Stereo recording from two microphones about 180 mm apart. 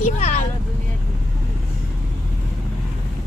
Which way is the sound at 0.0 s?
35° left (ahead or behind).